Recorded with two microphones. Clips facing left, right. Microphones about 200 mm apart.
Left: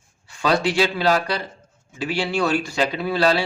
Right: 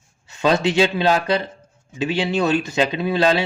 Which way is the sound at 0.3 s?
20° right (ahead or behind).